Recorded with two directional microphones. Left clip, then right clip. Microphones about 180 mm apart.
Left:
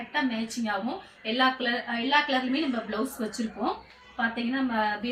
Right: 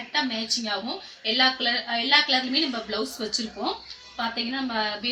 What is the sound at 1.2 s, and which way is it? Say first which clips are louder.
A woman's voice: right 3 dB; centre (ahead or behind).